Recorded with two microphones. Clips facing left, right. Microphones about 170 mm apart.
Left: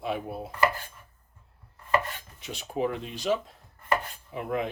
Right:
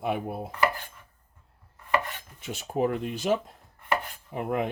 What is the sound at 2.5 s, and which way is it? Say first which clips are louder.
Speech: right 3 dB; 45° right (ahead or behind).